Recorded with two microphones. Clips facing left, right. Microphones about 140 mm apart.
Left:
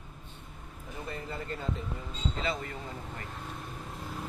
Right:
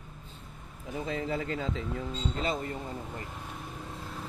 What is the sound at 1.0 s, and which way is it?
Speech, 90° right.